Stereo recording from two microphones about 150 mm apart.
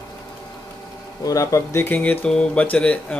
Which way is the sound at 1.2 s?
20° left (ahead or behind).